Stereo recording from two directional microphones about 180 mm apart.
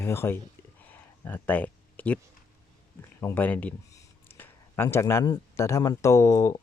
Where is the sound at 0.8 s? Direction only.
10° left (ahead or behind).